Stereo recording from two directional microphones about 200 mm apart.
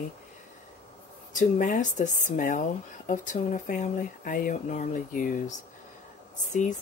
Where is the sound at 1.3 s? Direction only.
40° left (ahead or behind).